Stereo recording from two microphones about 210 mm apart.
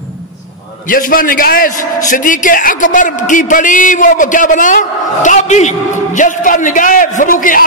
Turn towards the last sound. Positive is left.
turn(degrees=40)  # may be behind; listen again after turning